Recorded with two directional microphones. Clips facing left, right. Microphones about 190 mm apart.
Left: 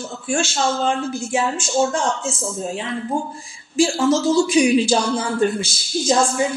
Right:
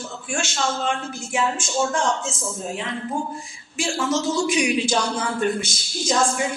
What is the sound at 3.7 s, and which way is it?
Speech, 30° left (ahead or behind).